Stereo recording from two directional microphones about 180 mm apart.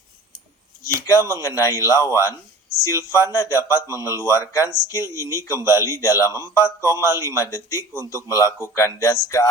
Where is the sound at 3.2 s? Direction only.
15° left (ahead or behind).